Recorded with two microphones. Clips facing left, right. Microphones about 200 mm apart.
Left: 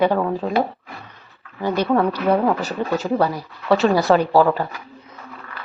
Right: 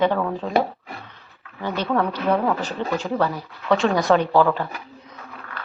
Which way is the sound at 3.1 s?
10° left (ahead or behind).